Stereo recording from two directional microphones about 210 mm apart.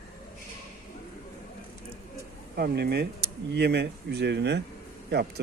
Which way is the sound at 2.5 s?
50° right (ahead or behind).